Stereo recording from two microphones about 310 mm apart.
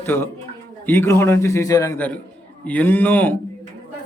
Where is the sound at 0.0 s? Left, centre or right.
Centre.